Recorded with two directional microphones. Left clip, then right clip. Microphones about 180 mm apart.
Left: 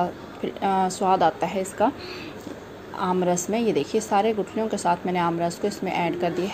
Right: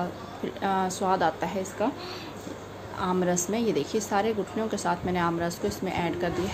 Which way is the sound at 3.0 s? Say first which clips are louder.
Left 4 dB; 10° left (ahead or behind).